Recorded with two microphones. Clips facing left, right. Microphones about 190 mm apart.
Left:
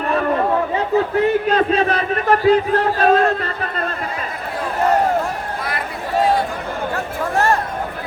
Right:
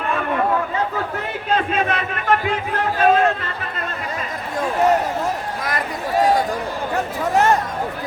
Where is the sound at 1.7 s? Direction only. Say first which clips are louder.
Left 4 dB; 35° left (ahead or behind).